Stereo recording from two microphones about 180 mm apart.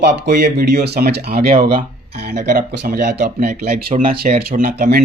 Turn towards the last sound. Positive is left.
turn(degrees=-55)  # may be behind; listen again after turning